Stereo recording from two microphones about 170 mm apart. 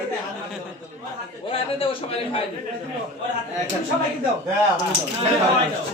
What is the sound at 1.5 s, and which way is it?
Speech, 35° left (ahead or behind).